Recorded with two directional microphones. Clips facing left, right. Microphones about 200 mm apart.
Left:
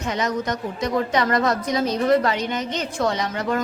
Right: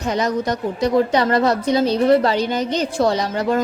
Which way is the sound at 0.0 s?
35° right (ahead or behind).